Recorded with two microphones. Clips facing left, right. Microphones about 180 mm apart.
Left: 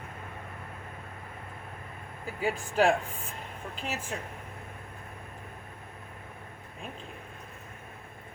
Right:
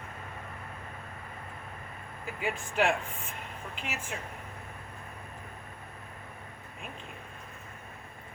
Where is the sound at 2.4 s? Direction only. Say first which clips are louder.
Left 4 dB; 35° left (ahead or behind).